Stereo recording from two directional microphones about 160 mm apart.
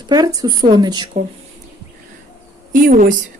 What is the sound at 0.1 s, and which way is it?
Speech, 25° right (ahead or behind).